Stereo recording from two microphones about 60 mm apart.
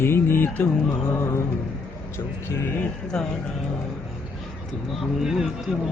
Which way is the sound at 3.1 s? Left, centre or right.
Centre.